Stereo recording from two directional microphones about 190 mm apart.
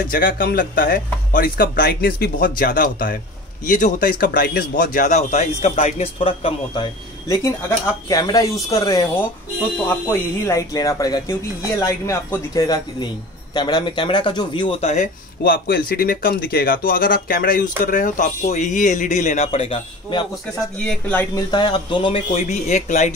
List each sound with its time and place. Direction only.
0.1 s a man's voice: 50° left (ahead or behind); by 20.2 s 25° left (ahead or behind)
20.8 s speech: 5° left (ahead or behind)
21.4 s a man's voice: 25° left (ahead or behind)